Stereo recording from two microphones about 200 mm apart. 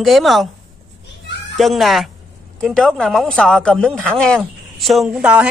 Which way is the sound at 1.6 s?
Centre (ahead or behind).